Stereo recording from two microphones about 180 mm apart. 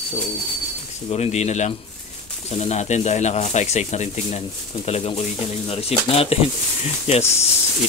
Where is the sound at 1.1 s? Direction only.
35° left (ahead or behind).